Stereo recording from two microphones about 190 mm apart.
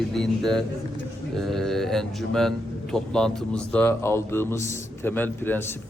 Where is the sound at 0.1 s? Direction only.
Centre (ahead or behind).